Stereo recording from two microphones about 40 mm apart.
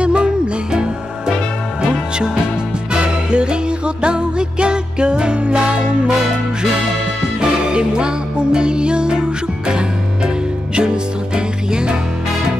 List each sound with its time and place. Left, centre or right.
0.0 s music: right
1.8 s music: centre
7.3 s music: centre